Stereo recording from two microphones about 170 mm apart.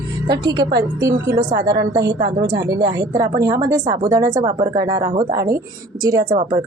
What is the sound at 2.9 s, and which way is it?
A woman's voice, 20° right (ahead or behind).